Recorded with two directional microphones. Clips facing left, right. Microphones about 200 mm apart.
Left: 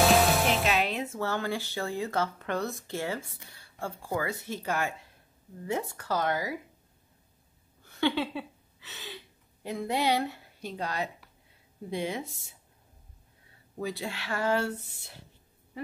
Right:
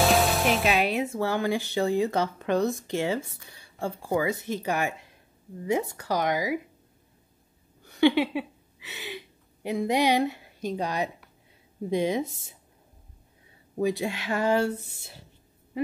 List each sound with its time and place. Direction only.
0.0 s music: centre (ahead or behind)
0.7 s speech: 15° right (ahead or behind)
8.0 s a woman's voice: 15° right (ahead or behind)
13.7 s speech: 15° right (ahead or behind)